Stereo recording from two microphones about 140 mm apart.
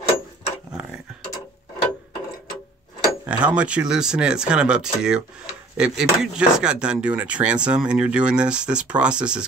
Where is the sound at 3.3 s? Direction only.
10° right (ahead or behind).